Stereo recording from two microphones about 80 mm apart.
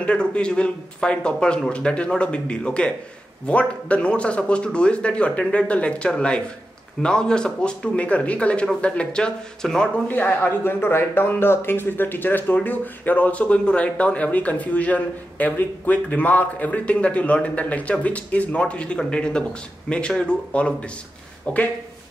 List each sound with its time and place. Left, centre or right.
0.0 s a man's voice: centre
10.0 s a man's voice: left